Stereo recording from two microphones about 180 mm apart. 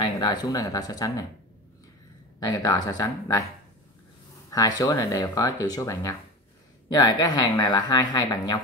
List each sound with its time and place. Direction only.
0.0 s speech: 25° left (ahead or behind)
2.4 s speech: 20° left (ahead or behind)
4.5 s speech: 20° left (ahead or behind)